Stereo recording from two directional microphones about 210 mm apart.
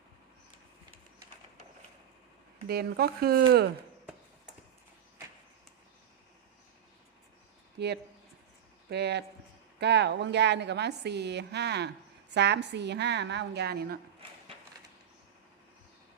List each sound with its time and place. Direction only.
2.6 s a woman's voice: 50° right (ahead or behind)
7.8 s a woman's voice: 50° right (ahead or behind)